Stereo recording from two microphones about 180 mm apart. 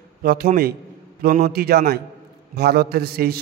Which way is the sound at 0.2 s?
55° right (ahead or behind).